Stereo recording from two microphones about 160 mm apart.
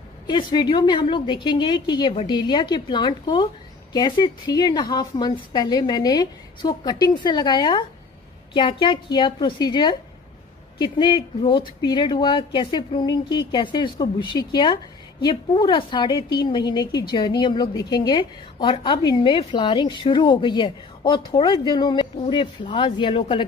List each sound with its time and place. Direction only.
0.3 s speech: 25° left (ahead or behind)